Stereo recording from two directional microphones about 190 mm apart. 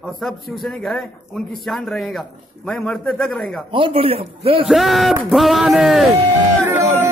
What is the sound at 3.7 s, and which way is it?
Speech, 30° right (ahead or behind).